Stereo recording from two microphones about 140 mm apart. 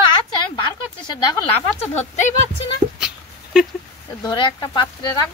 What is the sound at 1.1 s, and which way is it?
Speech, 30° left (ahead or behind).